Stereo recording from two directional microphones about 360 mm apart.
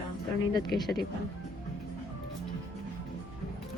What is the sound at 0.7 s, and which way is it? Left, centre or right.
Speech, left.